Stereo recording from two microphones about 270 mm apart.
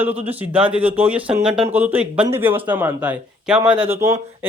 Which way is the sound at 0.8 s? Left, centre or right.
Centre.